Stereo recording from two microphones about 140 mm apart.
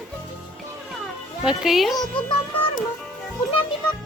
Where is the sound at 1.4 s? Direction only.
5° right (ahead or behind).